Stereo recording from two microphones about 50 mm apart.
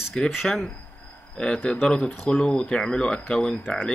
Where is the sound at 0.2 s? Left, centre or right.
Centre.